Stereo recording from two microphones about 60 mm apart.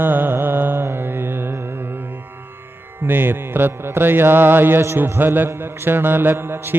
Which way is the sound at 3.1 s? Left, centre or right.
Right.